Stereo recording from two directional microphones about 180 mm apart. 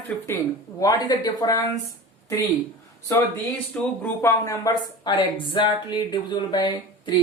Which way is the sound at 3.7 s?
10° left (ahead or behind).